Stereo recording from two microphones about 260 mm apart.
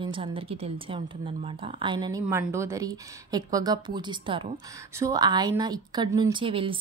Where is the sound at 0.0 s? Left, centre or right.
Centre.